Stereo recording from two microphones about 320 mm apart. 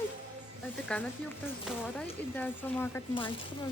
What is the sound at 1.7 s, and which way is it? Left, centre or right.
Speech, centre.